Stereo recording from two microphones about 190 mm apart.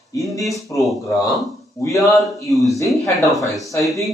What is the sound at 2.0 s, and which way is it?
Speech, centre (ahead or behind).